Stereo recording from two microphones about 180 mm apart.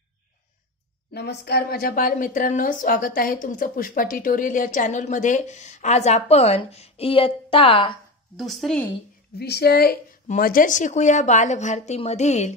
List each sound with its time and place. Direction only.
1.1 s speech: 65° left (ahead or behind); by 7.9 s 30° left (ahead or behind)
8.4 s speech: centre (ahead or behind)
9.4 s a woman's voice: 65° left (ahead or behind)
10.2 s a woman's voice: 50° left (ahead or behind)